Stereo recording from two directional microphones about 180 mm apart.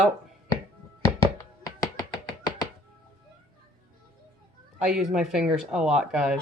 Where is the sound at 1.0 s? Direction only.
15° left (ahead or behind).